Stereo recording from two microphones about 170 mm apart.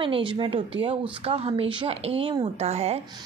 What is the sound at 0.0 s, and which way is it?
A woman's voice, 30° right (ahead or behind).